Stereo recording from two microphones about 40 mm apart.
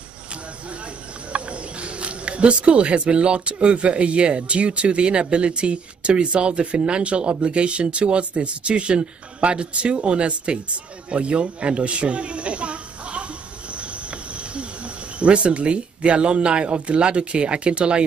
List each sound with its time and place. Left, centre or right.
1.3 s speech: right
11.1 s a sound: right
15.1 s speech: right